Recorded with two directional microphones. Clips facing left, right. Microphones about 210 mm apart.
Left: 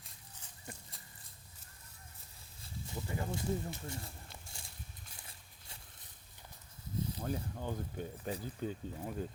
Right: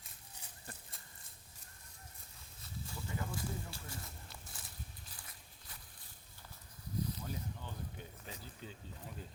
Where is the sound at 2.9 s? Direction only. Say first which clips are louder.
Left 4 dB; 30° left (ahead or behind).